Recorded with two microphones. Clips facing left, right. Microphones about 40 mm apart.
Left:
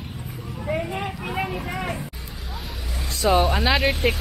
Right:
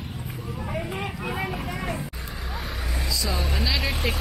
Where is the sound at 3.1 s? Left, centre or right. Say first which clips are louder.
Left 11 dB; left.